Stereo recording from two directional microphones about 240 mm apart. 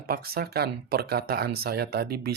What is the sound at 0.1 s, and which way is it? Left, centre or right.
Speech, right.